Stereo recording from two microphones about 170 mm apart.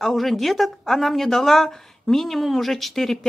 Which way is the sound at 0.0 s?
Centre (ahead or behind).